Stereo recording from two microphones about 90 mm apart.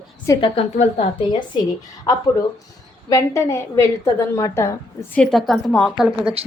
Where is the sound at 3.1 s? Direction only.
35° left (ahead or behind).